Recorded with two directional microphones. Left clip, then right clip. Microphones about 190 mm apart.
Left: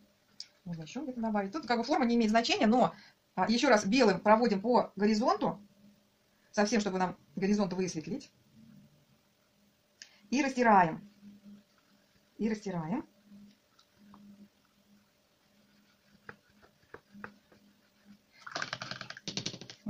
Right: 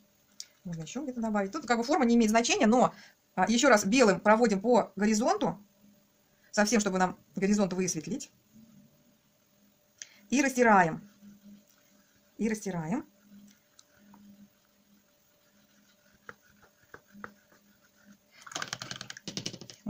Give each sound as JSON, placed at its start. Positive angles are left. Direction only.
{"t": 0.7, "sound": "speech", "side_deg": -40}
{"t": 10.3, "sound": "speech", "side_deg": -40}
{"t": 12.4, "sound": "speech", "side_deg": -40}
{"t": 18.5, "sound": "computer keyboard", "side_deg": 0}